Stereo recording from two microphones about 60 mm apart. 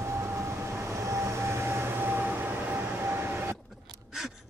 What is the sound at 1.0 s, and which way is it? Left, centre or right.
Vehicle, right.